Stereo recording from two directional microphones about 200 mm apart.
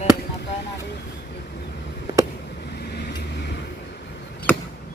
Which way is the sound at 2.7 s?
50° left (ahead or behind).